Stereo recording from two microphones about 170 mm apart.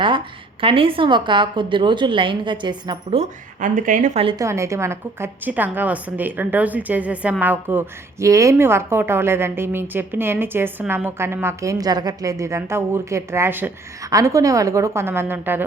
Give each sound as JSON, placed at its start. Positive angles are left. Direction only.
{"t": 0.6, "sound": "a woman's voice", "side_deg": -30}
{"t": 3.6, "sound": "speech", "side_deg": -50}
{"t": 4.4, "sound": "a woman's voice", "side_deg": -15}